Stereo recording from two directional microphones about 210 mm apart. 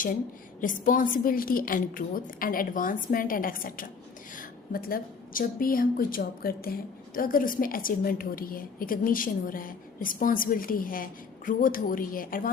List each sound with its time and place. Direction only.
0.6 s a woman's voice: 40° left (ahead or behind)